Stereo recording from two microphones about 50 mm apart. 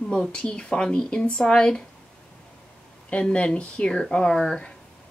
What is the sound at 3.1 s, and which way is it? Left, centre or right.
Speech, left.